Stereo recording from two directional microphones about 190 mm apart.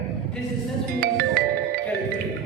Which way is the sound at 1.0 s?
50° right (ahead or behind).